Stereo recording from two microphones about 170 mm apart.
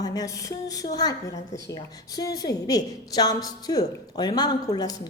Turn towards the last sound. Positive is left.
turn(degrees=25)  # may be behind; listen again after turning